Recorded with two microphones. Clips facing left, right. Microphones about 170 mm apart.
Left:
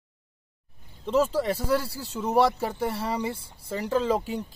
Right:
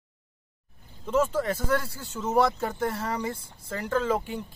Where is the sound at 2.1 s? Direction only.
10° left (ahead or behind).